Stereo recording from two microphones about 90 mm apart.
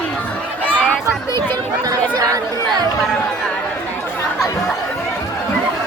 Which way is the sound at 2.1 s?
40° right (ahead or behind).